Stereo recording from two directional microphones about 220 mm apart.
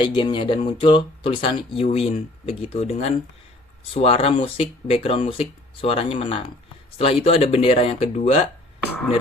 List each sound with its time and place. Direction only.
0.0 s speech: 20° left (ahead or behind)